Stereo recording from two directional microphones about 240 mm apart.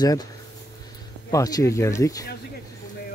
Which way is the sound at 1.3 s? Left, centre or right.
Centre.